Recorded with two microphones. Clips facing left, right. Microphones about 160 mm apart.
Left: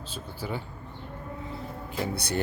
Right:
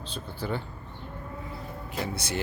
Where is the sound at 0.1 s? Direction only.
10° left (ahead or behind).